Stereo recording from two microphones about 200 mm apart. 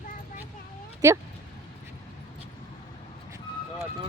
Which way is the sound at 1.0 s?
15° right (ahead or behind).